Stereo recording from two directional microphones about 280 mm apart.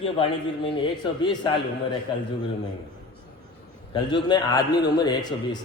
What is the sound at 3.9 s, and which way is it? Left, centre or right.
A man's voice, centre.